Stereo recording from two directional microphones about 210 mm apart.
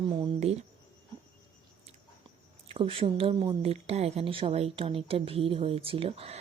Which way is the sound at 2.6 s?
25° right (ahead or behind).